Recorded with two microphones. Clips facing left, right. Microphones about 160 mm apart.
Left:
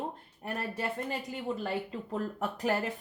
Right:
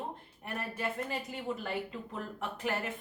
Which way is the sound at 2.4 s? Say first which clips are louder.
Left 3 dB; 40° left (ahead or behind).